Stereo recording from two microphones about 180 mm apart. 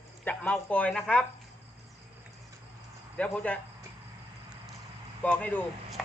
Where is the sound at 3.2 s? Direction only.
10° left (ahead or behind).